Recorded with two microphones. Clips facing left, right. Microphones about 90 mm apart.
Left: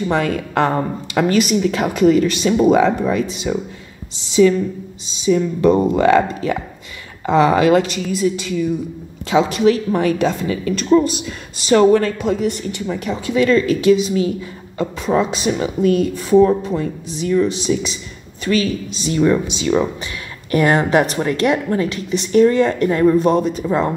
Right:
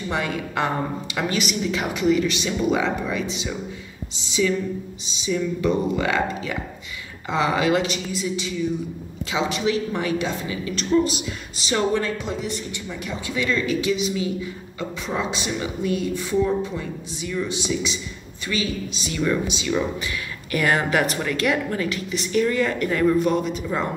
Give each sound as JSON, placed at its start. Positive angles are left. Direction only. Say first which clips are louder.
{"t": 0.1, "sound": "a woman's voice", "louder": "left 5 dB", "side_deg": 50}